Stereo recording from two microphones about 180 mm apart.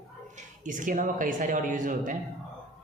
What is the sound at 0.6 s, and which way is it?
Speech, 45° right (ahead or behind).